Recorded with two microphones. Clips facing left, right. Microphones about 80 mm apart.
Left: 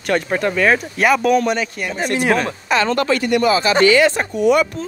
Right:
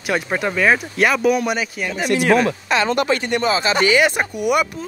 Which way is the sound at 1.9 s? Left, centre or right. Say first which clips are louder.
Right 1 dB; left.